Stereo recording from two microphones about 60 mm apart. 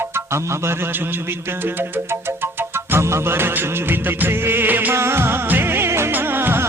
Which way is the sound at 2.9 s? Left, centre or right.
Right.